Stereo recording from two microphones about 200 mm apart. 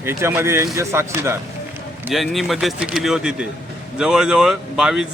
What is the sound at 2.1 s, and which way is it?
Speech, centre (ahead or behind).